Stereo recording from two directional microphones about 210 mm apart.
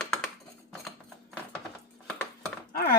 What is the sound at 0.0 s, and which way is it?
Typing, 5° left (ahead or behind).